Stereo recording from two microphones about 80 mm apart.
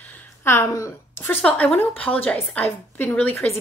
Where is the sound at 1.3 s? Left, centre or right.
Left.